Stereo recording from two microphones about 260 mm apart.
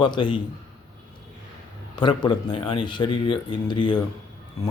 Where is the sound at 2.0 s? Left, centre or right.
Centre.